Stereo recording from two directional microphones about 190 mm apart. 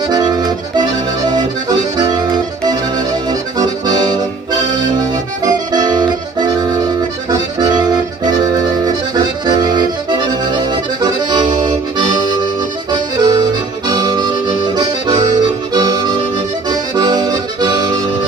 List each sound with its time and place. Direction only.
0.1 s accordion: 20° right (ahead or behind)